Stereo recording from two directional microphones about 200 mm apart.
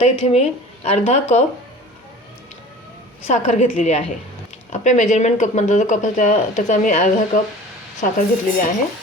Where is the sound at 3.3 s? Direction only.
35° left (ahead or behind).